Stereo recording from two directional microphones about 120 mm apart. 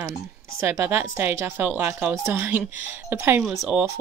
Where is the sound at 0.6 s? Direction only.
20° right (ahead or behind).